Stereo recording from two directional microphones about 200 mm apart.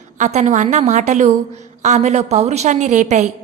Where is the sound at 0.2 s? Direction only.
35° right (ahead or behind).